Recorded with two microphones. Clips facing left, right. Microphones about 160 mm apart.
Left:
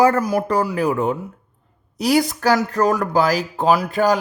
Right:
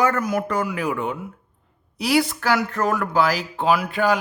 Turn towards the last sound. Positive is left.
turn(degrees=40)  # may be behind; listen again after turning